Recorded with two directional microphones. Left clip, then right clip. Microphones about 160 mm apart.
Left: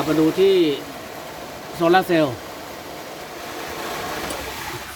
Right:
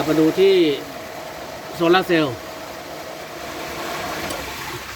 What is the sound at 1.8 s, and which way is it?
Speech, 10° left (ahead or behind).